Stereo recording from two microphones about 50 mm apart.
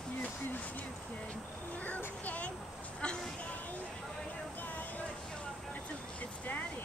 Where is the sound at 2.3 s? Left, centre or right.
Left.